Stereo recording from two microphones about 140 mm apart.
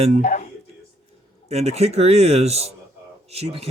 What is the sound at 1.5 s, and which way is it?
Speech, 50° right (ahead or behind).